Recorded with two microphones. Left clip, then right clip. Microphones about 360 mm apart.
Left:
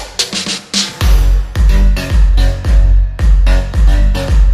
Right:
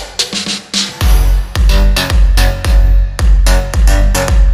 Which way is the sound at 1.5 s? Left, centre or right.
Centre.